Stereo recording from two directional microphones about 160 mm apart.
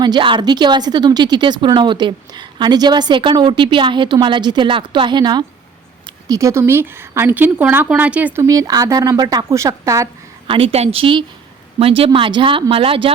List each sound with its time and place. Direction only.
0.0 s a woman's voice: 30° right (ahead or behind); by 8.3 s 10° right (ahead or behind)
8.4 s a woman's voice: 20° right (ahead or behind)
10.4 s speech: 35° right (ahead or behind)